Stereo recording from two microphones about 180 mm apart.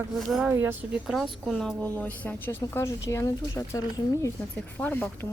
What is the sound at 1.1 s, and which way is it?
Speech, centre (ahead or behind).